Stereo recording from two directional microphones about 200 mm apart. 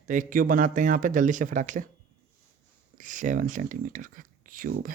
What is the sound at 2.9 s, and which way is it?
Speech, 40° right (ahead or behind).